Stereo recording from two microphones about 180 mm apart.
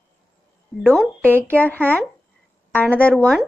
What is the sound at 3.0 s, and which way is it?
Speech, 5° left (ahead or behind).